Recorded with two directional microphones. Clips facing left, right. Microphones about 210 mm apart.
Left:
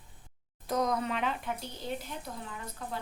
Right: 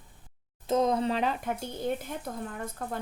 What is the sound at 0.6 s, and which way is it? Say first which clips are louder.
Speech: right 5 dB; 25° right (ahead or behind).